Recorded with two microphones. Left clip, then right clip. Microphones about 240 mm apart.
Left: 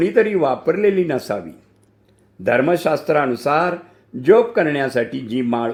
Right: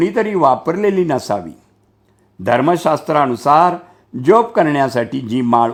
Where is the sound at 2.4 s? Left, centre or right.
Right.